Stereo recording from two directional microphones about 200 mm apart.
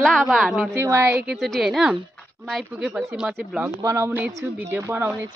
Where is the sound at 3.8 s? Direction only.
15° right (ahead or behind).